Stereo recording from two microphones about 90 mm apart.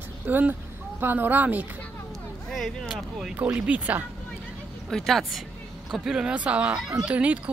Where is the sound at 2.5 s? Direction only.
Centre (ahead or behind).